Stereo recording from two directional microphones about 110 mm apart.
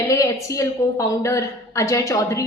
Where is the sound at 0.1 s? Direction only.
30° left (ahead or behind).